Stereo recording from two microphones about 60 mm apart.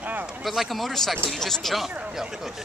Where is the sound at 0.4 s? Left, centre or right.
Centre.